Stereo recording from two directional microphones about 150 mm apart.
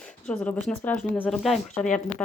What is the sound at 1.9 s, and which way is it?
Speech, 55° left (ahead or behind).